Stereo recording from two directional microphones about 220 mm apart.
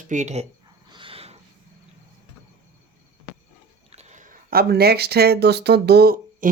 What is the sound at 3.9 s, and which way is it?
Speech, 30° right (ahead or behind).